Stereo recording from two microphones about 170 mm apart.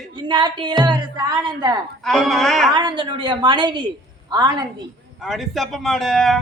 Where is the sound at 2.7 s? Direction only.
25° right (ahead or behind).